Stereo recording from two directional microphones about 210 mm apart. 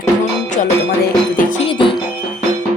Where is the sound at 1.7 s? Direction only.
25° left (ahead or behind).